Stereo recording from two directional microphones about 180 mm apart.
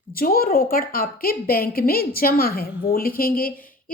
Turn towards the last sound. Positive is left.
turn(degrees=55)  # may be behind; listen again after turning